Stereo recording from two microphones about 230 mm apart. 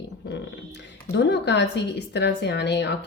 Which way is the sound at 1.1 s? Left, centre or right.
Left.